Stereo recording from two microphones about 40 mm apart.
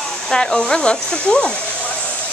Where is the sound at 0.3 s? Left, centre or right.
Centre.